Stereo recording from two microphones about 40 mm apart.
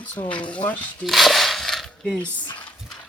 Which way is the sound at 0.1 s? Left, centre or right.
Left.